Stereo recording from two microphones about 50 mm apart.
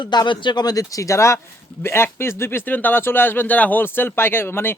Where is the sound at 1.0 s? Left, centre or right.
Left.